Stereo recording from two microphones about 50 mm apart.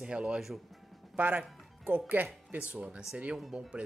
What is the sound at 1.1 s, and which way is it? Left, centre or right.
Speech, right.